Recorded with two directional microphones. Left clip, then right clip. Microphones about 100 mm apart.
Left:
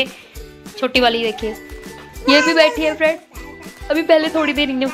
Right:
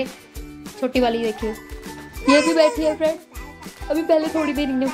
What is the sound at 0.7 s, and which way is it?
Speech, 25° right (ahead or behind).